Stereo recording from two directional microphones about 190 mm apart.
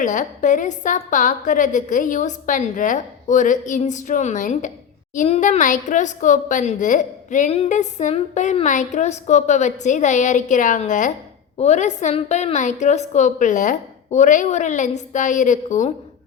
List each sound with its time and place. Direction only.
0.0 s a woman's voice: 40° left (ahead or behind)